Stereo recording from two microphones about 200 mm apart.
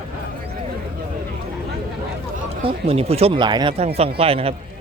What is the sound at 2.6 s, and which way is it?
Speech, 30° right (ahead or behind).